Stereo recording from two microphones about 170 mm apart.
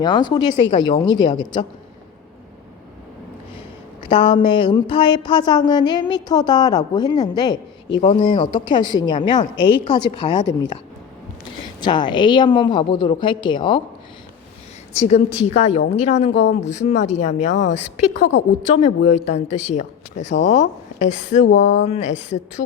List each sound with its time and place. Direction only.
0.0 s speech: 25° left (ahead or behind)
4.1 s speech: 30° left (ahead or behind)
11.8 s speech: 25° left (ahead or behind)
14.9 s a woman's voice: 40° left (ahead or behind)
18.1 s speech: 90° left
18.7 s speech: 40° left (ahead or behind)
21.4 s speech: 90° left
21.8 s a woman's voice: 40° left (ahead or behind)